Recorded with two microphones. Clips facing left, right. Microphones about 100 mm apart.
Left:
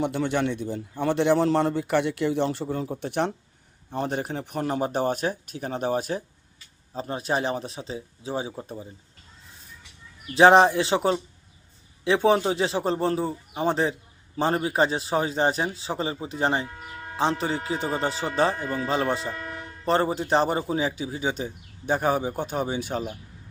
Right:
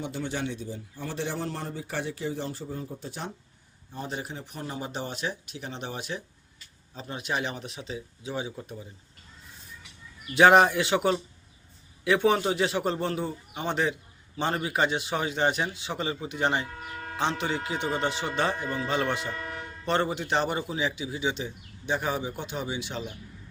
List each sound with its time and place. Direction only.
0.0 s a man's voice: 60° left (ahead or behind); by 8.9 s 35° left (ahead or behind)
10.3 s speech: 30° left (ahead or behind)